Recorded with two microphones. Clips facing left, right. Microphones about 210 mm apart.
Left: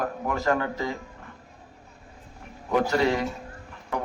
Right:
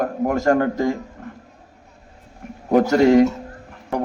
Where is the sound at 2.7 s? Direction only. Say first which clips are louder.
Right 9 dB; 45° right (ahead or behind).